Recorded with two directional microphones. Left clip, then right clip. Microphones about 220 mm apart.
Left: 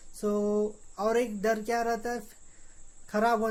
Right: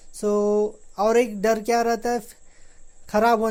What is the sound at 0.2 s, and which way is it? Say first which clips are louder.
Speech: right 8 dB; 30° right (ahead or behind).